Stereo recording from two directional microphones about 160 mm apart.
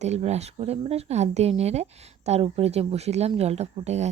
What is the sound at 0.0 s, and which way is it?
Speech, 45° right (ahead or behind).